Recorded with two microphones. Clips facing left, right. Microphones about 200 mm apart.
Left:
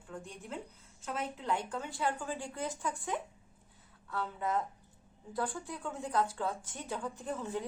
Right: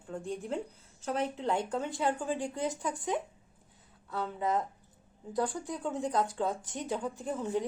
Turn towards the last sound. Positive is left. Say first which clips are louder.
# right 5 dB
turn(degrees=-15)  # may be behind; listen again after turning